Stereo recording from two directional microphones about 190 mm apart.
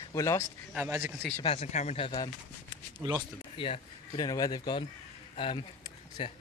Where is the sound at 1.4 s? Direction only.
35° left (ahead or behind).